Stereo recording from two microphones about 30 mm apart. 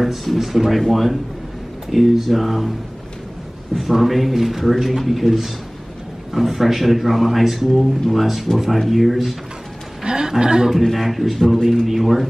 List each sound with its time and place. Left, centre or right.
0.2 s speech: centre
3.7 s speech: centre
10.0 s a sound: right
10.4 s speech: right
11.0 s speech: centre